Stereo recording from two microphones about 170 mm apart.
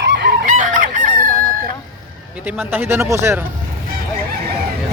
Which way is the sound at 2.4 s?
10° right (ahead or behind).